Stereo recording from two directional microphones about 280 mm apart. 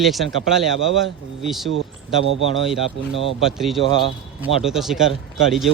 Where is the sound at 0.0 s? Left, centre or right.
Centre.